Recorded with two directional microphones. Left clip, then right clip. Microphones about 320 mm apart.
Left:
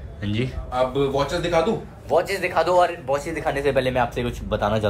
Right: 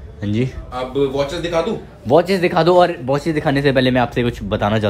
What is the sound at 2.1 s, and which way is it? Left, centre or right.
A man's voice, right.